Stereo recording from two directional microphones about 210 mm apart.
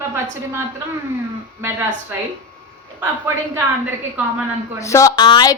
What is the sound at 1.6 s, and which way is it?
Speech, 10° right (ahead or behind).